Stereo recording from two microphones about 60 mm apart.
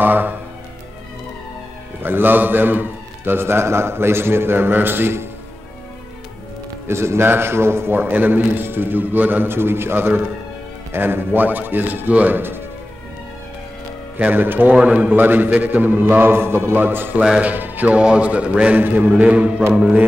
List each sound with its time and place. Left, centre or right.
0.0 s music: right
2.0 s a man's voice: right
6.9 s a man's voice: right
14.1 s a man's voice: right
17.2 s speech: centre
19.7 s mantra: centre